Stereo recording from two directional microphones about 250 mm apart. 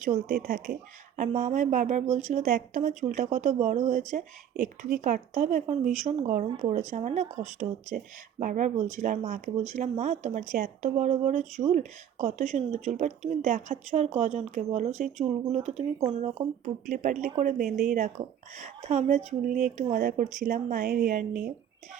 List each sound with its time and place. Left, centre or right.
0.3 s speech: right